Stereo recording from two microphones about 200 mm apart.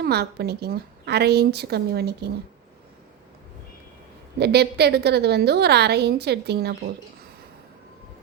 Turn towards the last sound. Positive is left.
turn(degrees=-55)  # may be behind; listen again after turning